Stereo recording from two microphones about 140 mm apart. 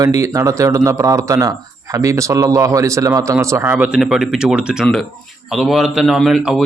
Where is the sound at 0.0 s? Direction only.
25° right (ahead or behind).